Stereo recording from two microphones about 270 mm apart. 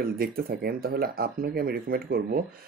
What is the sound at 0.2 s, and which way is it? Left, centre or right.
Speech, right.